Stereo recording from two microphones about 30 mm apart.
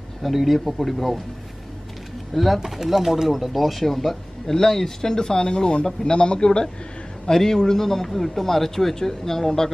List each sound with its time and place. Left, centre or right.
0.2 s speech: centre
2.3 s speech: centre
2.6 s speech: centre; by 6.7 s left
7.2 s a man's voice: centre